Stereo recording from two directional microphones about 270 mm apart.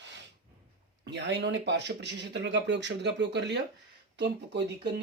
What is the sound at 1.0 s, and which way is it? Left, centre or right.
Speech, right.